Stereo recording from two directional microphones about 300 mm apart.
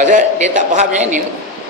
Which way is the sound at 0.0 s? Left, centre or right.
Right.